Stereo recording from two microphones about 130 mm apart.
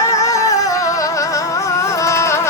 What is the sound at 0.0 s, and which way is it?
Music, 25° left (ahead or behind).